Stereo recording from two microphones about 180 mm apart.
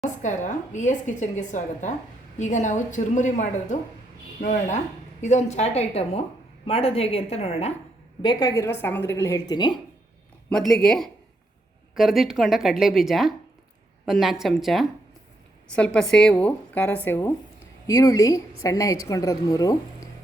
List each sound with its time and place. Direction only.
0.0 s a woman's voice: 45° left (ahead or behind)
8.2 s speech: 25° left (ahead or behind)
10.5 s speech: centre (ahead or behind); by 20.1 s 20° left (ahead or behind)